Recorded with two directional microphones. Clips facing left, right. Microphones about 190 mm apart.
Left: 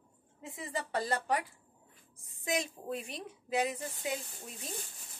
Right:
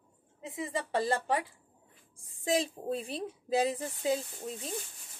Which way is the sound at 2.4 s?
30° right (ahead or behind).